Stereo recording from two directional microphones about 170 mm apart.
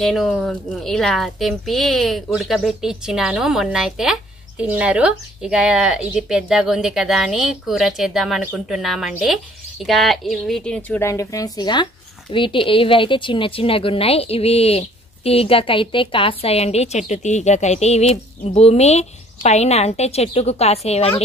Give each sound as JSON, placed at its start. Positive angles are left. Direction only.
{"t": 0.0, "sound": "a woman's voice", "side_deg": 0}